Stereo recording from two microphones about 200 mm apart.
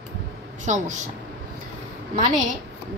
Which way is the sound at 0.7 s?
35° right (ahead or behind).